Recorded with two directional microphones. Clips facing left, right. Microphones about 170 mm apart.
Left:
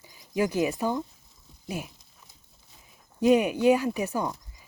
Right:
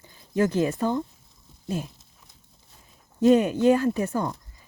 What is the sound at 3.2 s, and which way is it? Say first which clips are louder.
Speech: right 3 dB; 10° left (ahead or behind).